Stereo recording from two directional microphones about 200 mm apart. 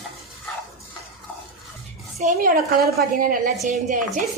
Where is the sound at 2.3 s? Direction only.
50° right (ahead or behind).